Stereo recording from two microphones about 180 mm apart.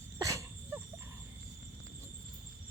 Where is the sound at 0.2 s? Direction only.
15° right (ahead or behind).